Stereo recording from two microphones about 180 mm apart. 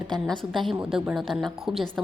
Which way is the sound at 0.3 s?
Centre (ahead or behind).